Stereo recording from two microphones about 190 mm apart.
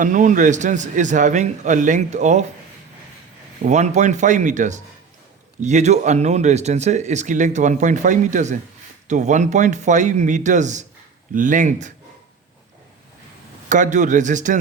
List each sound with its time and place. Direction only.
0.0 s speech: 45° right (ahead or behind)
3.6 s speech: 40° right (ahead or behind)
13.7 s speech: 40° right (ahead or behind)